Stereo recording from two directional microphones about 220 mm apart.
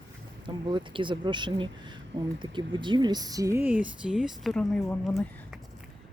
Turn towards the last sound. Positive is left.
turn(degrees=5)  # may be behind; listen again after turning